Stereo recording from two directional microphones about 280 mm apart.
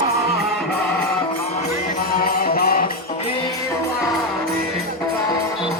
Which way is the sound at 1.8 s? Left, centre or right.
Left.